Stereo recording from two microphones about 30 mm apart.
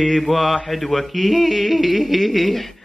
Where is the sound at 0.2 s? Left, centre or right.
Centre.